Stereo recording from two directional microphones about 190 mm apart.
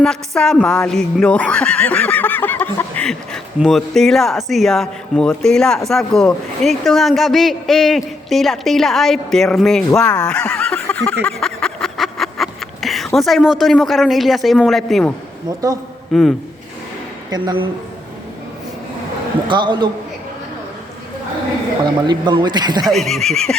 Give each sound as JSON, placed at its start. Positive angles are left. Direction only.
{"t": 0.0, "sound": "speech", "side_deg": 5}
{"t": 10.8, "sound": "a sound", "side_deg": 5}
{"t": 15.4, "sound": "speech", "side_deg": -20}
{"t": 16.1, "sound": "speech", "side_deg": 0}
{"t": 17.3, "sound": "speech", "side_deg": -25}
{"t": 19.5, "sound": "speech", "side_deg": -25}
{"t": 22.0, "sound": "speech", "side_deg": -25}
{"t": 22.9, "sound": "speech", "side_deg": 0}